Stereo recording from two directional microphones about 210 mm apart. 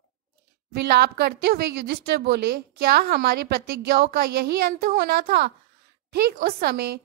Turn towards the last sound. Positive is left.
turn(degrees=-50)  # may be behind; listen again after turning